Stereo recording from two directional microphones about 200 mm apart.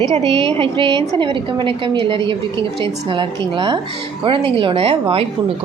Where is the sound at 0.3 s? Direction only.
30° right (ahead or behind).